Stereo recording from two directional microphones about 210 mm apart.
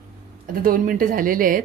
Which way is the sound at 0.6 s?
40° right (ahead or behind).